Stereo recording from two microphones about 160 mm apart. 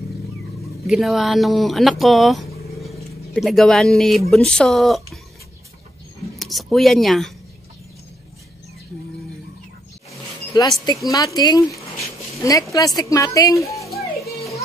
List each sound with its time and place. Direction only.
0.8 s speech: centre (ahead or behind)
6.3 s speech: centre (ahead or behind)
10.5 s speech: 25° left (ahead or behind)